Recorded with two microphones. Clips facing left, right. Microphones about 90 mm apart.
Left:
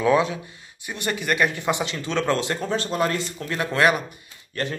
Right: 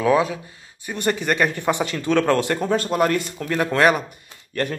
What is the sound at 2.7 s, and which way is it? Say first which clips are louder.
Speech: right 4 dB; 45° right (ahead or behind).